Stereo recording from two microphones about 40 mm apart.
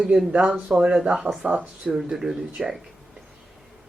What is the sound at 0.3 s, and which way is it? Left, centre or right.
Speech, right.